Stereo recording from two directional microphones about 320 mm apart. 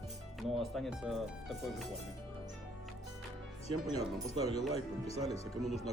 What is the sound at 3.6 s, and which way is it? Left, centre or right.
Speech, centre.